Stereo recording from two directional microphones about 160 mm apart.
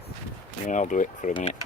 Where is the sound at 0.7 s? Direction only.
50° left (ahead or behind).